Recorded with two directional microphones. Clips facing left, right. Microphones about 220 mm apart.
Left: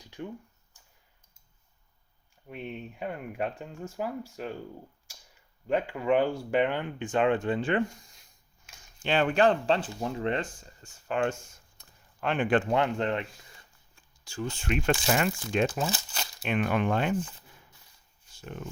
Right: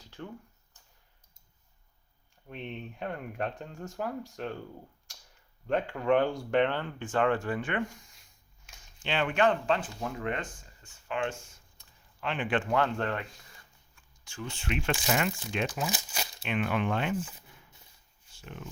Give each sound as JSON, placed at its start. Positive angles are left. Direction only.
{"t": 0.0, "sound": "a sound", "side_deg": 15}
{"t": 2.5, "sound": "speech", "side_deg": 5}
{"t": 5.6, "sound": "speech", "side_deg": 10}
{"t": 10.8, "sound": "speech", "side_deg": 45}
{"t": 12.7, "sound": "speech", "side_deg": 20}
{"t": 13.9, "sound": "speech", "side_deg": 35}
{"t": 15.9, "sound": "crumpling", "side_deg": -15}
{"t": 16.4, "sound": "speech", "side_deg": 45}
{"t": 18.3, "sound": "speech", "side_deg": 40}